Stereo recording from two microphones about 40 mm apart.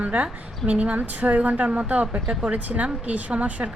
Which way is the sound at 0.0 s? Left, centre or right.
Right.